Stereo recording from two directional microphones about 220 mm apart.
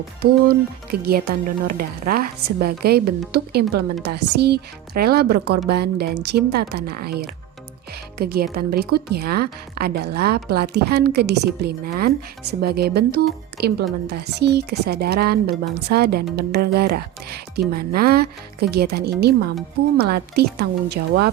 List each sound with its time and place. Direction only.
0.2 s a woman's voice: 45° right (ahead or behind)